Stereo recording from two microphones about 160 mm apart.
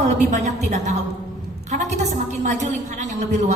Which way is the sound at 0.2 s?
45° right (ahead or behind).